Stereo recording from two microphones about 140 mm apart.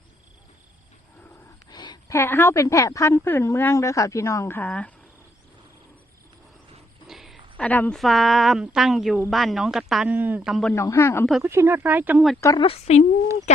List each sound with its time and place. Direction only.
1.7 s a sound: 30° left (ahead or behind)
2.1 s a woman's voice: 15° left (ahead or behind)
7.1 s a sound: centre (ahead or behind)
7.5 s a woman's voice: 10° left (ahead or behind)
10.8 s speech: 15° left (ahead or behind)
11.4 s speech: 20° right (ahead or behind)
12.5 s a woman's voice: 45° left (ahead or behind)